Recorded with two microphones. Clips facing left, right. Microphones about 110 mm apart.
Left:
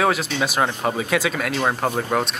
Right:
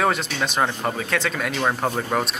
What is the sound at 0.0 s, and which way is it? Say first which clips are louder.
Speech: left 2 dB; centre (ahead or behind).